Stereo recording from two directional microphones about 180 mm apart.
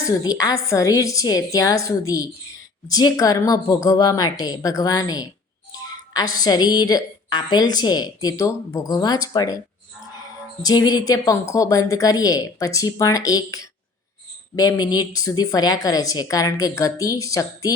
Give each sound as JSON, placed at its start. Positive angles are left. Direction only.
{"t": 0.1, "sound": "a woman's voice", "side_deg": 20}
{"t": 10.6, "sound": "a woman's voice", "side_deg": 20}